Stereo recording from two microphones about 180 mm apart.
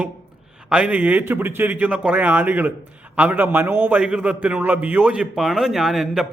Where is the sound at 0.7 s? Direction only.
5° right (ahead or behind).